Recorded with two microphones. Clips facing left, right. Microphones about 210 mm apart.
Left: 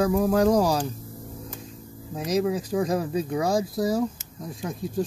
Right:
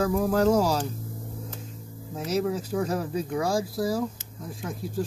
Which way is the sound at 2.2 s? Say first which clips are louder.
Left 2 dB; 15° left (ahead or behind).